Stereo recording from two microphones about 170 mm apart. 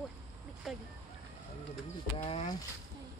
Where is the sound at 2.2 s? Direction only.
40° left (ahead or behind).